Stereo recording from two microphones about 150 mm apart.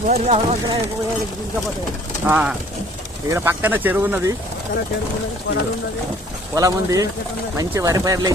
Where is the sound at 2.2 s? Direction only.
10° right (ahead or behind).